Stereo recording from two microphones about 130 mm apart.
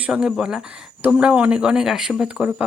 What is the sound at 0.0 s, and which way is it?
Speech, 5° right (ahead or behind).